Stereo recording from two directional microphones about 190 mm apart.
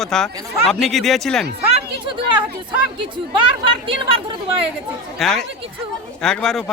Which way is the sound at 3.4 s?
25° right (ahead or behind).